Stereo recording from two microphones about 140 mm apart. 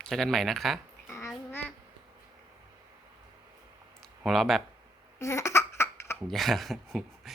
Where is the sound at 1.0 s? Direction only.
20° left (ahead or behind).